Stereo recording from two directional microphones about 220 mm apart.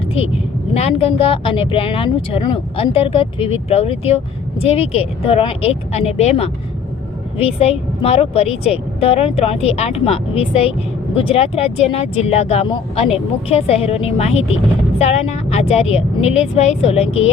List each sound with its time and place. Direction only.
0.7 s speech: 30° left (ahead or behind)